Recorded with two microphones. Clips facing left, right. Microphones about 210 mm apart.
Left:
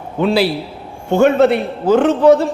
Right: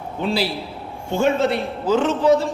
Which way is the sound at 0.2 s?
65° left (ahead or behind).